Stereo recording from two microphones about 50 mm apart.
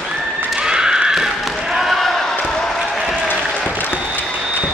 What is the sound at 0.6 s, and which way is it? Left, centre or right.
Neigh, centre.